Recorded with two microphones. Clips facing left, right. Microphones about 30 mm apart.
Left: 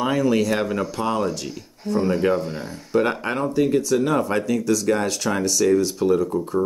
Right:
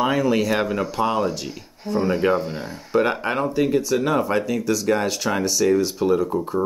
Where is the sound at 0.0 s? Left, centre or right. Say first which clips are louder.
Even; centre.